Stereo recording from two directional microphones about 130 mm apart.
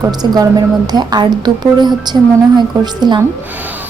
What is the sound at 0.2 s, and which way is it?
A woman's voice, 30° right (ahead or behind).